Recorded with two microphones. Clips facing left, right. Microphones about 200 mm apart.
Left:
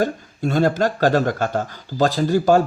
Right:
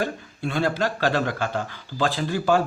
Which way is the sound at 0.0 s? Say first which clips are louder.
Left 6 dB; 45° left (ahead or behind).